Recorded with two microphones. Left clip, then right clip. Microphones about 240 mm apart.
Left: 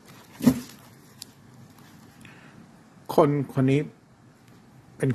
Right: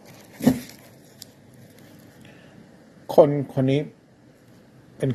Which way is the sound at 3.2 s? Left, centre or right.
Centre.